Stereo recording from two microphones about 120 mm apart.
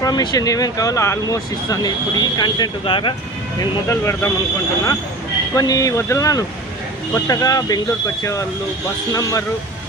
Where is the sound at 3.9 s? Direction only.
20° left (ahead or behind).